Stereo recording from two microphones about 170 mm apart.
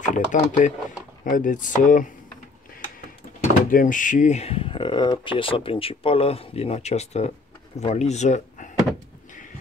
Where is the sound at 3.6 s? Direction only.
50° left (ahead or behind).